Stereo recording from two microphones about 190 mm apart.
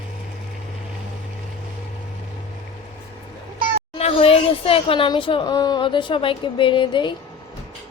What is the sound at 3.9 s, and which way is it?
Speech, 30° left (ahead or behind).